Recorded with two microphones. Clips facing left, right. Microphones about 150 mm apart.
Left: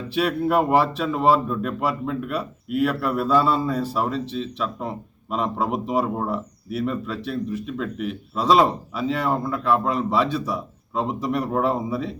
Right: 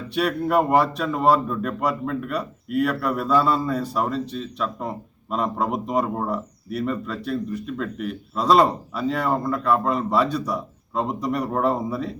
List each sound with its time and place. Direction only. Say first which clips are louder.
0.1 s speech: even; 5° left (ahead or behind)